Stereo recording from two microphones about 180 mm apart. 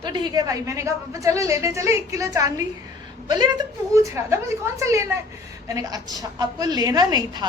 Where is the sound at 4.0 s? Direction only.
15° right (ahead or behind).